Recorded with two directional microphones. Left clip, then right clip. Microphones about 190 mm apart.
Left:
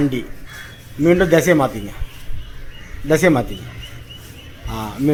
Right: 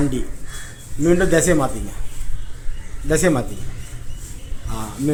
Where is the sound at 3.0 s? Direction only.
15° left (ahead or behind).